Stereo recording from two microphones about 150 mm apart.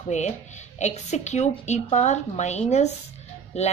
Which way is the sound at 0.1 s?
50° left (ahead or behind).